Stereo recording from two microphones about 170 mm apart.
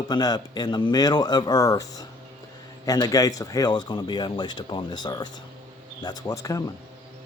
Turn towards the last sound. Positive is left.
turn(degrees=20)  # may be behind; listen again after turning